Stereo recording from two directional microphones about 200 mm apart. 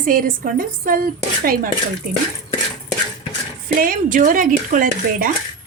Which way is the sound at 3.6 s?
45° right (ahead or behind).